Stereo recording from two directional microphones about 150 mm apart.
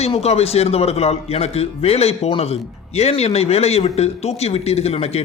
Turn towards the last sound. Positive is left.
turn(degrees=45)  # may be behind; listen again after turning